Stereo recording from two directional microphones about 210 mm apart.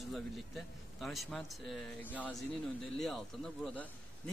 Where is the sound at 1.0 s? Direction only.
Centre (ahead or behind).